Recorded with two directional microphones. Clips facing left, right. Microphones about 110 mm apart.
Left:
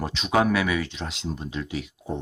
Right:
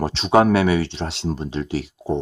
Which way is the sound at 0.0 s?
35° right (ahead or behind).